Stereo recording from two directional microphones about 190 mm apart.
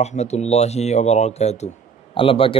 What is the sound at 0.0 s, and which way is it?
A man's voice, 35° left (ahead or behind).